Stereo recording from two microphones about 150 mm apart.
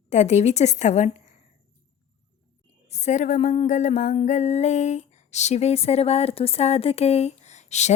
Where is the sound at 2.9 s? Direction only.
50° left (ahead or behind).